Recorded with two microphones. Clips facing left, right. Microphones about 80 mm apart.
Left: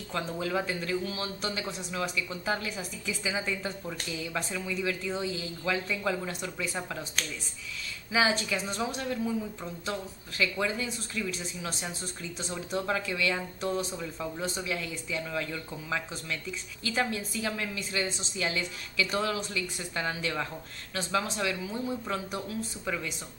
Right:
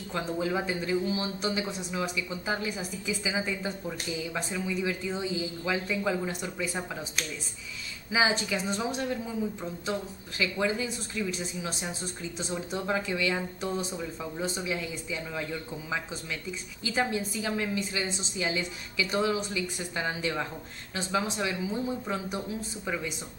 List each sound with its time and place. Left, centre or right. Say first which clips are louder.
0.1 s speech: right 1 dB; centre
8.1 s speech: even; centre
8.6 s speech: right 2 dB; centre